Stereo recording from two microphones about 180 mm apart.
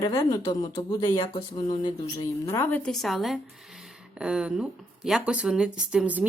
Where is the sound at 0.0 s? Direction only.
20° left (ahead or behind).